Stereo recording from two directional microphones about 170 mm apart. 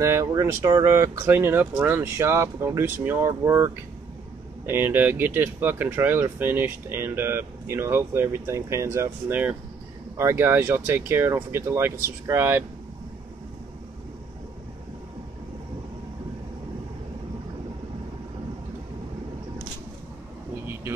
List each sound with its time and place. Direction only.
0.0 s speech: 15° right (ahead or behind)